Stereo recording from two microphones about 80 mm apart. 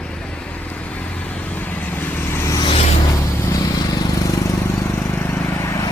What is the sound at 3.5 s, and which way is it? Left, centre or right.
Vehicle, left.